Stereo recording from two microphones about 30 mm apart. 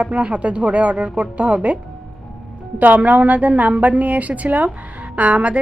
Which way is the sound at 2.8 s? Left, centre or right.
Right.